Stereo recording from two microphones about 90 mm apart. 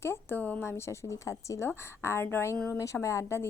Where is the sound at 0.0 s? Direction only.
25° left (ahead or behind).